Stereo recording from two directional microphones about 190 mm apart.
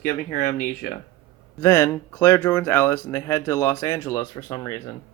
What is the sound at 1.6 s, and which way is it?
Speech, 15° left (ahead or behind).